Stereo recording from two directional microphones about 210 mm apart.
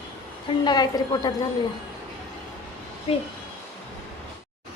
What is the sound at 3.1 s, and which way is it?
Speech, 25° left (ahead or behind).